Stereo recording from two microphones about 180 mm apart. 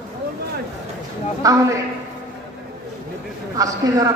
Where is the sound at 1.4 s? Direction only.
20° right (ahead or behind).